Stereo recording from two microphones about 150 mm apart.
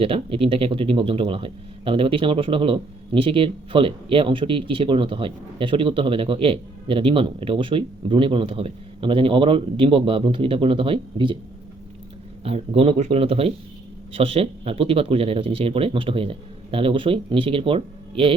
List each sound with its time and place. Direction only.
0.0 s speech: 40° right (ahead or behind)
12.5 s speech: 40° right (ahead or behind)